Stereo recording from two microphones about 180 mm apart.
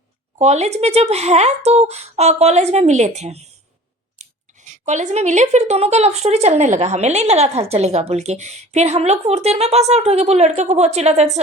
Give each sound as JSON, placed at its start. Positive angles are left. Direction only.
{"t": 0.3, "sound": "speech", "side_deg": -40}